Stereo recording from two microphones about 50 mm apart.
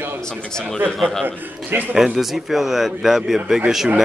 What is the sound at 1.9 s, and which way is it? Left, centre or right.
A man's voice, centre.